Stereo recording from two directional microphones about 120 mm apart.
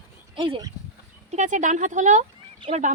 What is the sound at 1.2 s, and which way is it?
Speech, 85° right.